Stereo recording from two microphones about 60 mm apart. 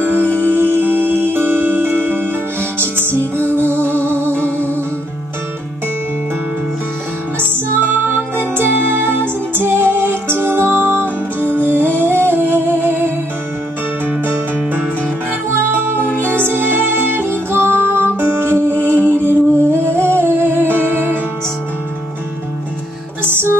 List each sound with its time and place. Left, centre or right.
0.4 s music: right
7.3 s music: right
23.2 s music: right